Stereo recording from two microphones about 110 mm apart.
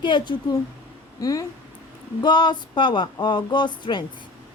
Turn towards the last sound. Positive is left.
turn(degrees=45)  # may be behind; listen again after turning